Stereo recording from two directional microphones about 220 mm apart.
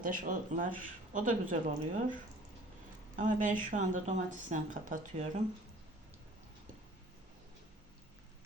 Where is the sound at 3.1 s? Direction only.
35° right (ahead or behind).